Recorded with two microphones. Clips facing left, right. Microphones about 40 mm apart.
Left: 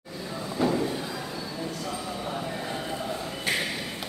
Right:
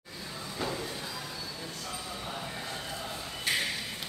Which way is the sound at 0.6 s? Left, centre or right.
Left.